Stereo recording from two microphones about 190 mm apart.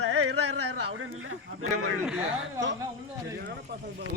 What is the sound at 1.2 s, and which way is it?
Speech, 90° right.